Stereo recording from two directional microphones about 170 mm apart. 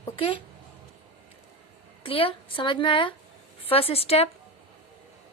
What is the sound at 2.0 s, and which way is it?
A woman's voice, 30° left (ahead or behind).